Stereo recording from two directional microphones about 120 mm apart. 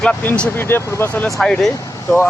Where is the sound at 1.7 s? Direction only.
25° left (ahead or behind).